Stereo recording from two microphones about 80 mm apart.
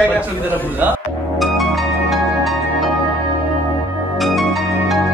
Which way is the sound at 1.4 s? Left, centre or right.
Centre.